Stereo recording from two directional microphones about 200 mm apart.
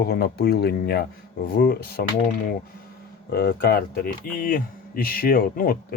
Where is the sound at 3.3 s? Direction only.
50° left (ahead or behind).